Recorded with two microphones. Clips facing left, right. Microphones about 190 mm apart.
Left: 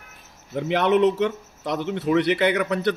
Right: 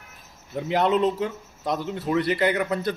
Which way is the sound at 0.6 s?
75° left (ahead or behind).